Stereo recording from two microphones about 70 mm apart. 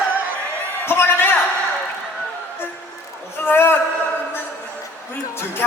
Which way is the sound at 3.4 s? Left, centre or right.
Left.